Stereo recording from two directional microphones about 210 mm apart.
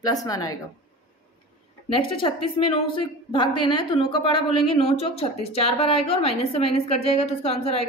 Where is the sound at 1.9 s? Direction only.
25° left (ahead or behind).